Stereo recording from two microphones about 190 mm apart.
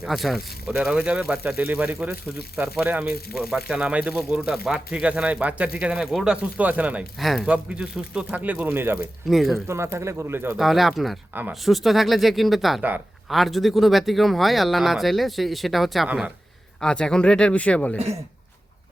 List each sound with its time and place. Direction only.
0.0 s speech: centre (ahead or behind)
9.2 s speech: centre (ahead or behind)
9.6 s speech: 15° right (ahead or behind)
10.6 s speech: centre (ahead or behind)
17.9 s speech: 35° right (ahead or behind)